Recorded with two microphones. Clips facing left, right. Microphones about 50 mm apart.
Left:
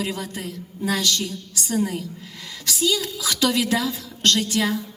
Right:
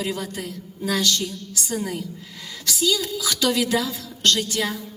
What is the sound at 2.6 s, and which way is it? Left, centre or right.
A woman's voice, left.